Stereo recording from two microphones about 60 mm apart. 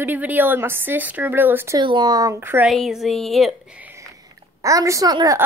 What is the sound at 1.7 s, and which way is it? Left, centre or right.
Speech, right.